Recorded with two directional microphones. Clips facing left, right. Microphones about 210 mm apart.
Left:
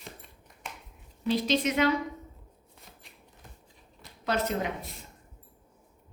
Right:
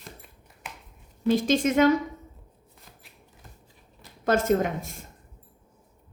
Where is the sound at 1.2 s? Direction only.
50° right (ahead or behind).